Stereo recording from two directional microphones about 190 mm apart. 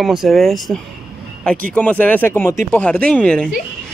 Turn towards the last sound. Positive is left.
turn(degrees=5)  # may be behind; listen again after turning